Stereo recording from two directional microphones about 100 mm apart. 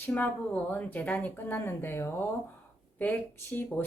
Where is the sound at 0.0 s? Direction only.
15° left (ahead or behind).